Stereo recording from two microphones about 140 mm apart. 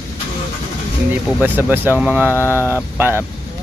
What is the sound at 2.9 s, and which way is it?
Speech, 15° right (ahead or behind).